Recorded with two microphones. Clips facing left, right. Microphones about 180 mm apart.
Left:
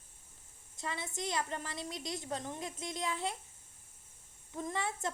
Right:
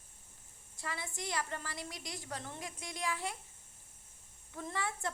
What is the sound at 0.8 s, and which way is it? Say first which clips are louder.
A woman's voice: left 3 dB; 20° left (ahead or behind).